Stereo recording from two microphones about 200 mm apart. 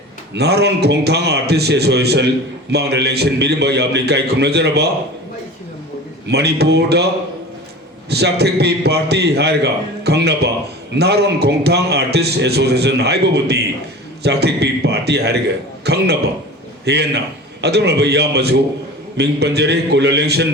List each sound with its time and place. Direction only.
0.3 s a man's voice: 55° right (ahead or behind)
6.2 s a man's voice: 55° right (ahead or behind)
8.1 s a man's voice: 55° right (ahead or behind)